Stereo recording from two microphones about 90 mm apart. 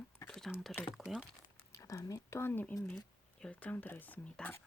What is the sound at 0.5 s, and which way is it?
Speech, 15° left (ahead or behind).